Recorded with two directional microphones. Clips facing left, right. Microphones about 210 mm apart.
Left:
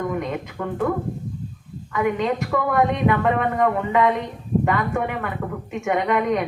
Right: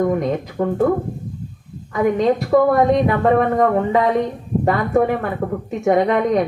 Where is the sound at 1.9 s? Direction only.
35° right (ahead or behind).